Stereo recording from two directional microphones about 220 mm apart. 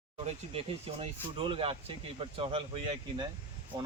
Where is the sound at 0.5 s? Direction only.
25° right (ahead or behind).